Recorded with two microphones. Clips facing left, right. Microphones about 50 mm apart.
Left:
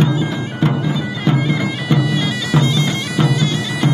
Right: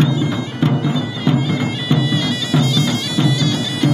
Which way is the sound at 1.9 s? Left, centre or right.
Left.